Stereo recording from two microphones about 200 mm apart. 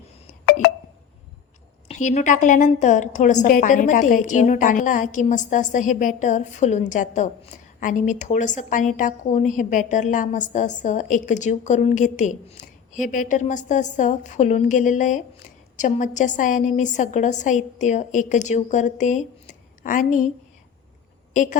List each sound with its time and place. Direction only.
1.9 s a woman's voice: 35° left (ahead or behind)
21.3 s a woman's voice: 40° left (ahead or behind)